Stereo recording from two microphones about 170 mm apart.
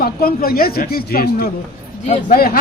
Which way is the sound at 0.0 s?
60° left (ahead or behind).